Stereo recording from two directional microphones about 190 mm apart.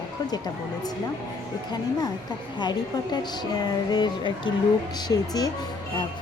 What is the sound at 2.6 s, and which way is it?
Speech, 25° left (ahead or behind).